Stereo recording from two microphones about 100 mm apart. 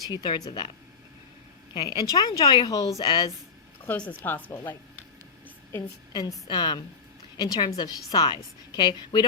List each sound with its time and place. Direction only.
0.1 s a woman's voice: 45° left (ahead or behind)
1.7 s a woman's voice: 50° left (ahead or behind)
3.8 s speech: 15° left (ahead or behind)
6.1 s a woman's voice: 45° left (ahead or behind)